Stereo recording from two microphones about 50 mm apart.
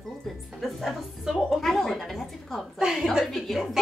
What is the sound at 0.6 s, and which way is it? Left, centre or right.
Speech, centre.